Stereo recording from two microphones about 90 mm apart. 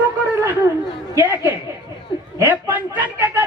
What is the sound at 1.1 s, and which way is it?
Speech, 25° right (ahead or behind).